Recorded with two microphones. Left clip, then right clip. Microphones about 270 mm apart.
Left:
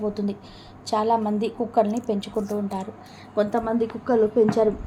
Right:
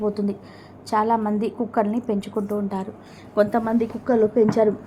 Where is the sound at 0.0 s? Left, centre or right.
Centre.